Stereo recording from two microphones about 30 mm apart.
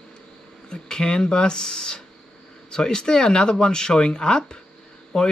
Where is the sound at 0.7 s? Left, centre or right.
Left.